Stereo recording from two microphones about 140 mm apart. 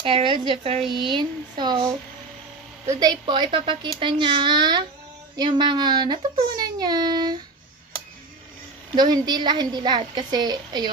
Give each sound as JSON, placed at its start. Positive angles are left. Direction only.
{"t": 0.0, "sound": "a woman's voice", "side_deg": -40}
{"t": 2.9, "sound": "a woman's voice", "side_deg": -30}
{"t": 8.9, "sound": "a woman's voice", "side_deg": -30}